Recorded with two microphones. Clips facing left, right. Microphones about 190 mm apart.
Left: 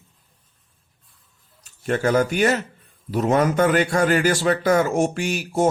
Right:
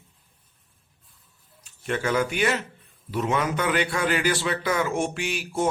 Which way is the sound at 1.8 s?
45° left (ahead or behind).